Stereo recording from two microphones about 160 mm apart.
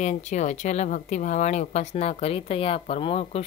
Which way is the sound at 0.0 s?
45° left (ahead or behind).